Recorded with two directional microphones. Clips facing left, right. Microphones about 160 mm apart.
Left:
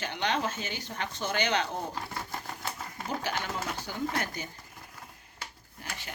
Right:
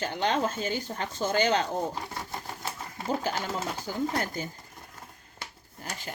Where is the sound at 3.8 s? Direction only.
45° right (ahead or behind).